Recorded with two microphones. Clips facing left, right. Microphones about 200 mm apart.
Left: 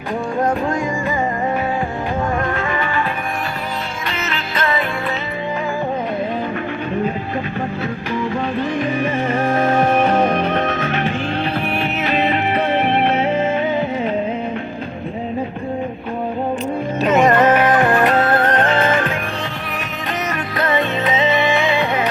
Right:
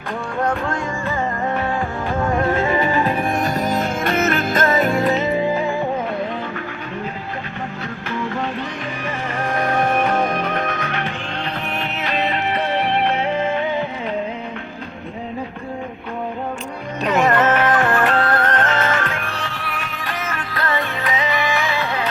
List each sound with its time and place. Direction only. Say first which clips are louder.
2.5 s music: right 3 dB; 20° right (ahead or behind)
2.7 s music: right 3 dB; 35° right (ahead or behind)
9.5 s music: left 2 dB; 25° left (ahead or behind)
12.8 s music: left 3 dB; 20° left (ahead or behind)
17.1 s music: left 3 dB; 20° left (ahead or behind)